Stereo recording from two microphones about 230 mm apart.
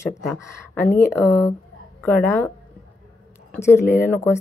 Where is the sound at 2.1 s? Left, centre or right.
Centre.